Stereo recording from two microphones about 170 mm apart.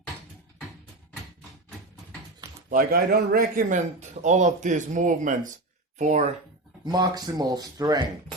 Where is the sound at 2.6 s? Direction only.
55° right (ahead or behind).